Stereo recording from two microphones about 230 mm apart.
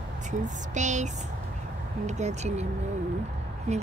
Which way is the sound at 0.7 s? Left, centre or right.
Right.